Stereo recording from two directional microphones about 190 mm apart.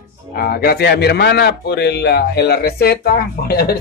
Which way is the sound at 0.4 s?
55° left (ahead or behind).